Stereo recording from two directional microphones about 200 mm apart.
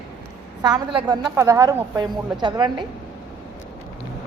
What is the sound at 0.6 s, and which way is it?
A woman's voice, 20° right (ahead or behind).